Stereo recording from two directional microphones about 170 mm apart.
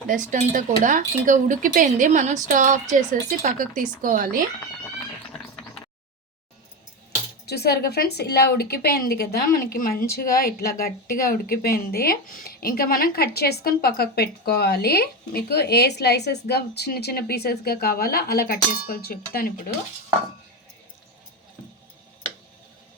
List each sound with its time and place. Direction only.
0.1 s speech: 50° right (ahead or behind)
7.4 s a woman's voice: 70° left (ahead or behind)